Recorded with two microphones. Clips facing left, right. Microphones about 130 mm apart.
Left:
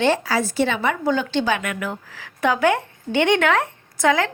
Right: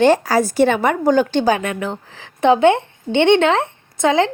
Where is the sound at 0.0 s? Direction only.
45° right (ahead or behind).